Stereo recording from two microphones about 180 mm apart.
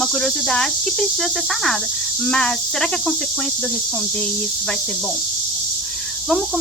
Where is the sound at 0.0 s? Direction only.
5° left (ahead or behind).